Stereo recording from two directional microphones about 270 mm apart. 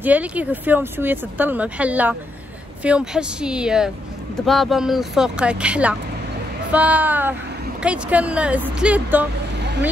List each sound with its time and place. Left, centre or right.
0.0 s speech: centre
9.6 s vehicle: right